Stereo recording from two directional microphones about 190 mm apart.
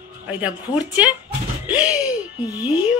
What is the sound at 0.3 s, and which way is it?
A woman's voice, 10° right (ahead or behind).